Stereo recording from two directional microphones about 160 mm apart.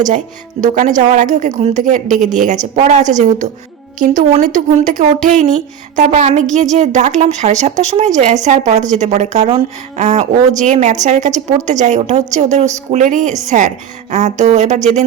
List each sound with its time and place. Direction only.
0.6 s speech: 50° right (ahead or behind)